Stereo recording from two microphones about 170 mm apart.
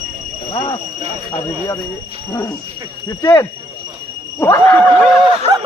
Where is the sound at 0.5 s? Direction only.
30° left (ahead or behind).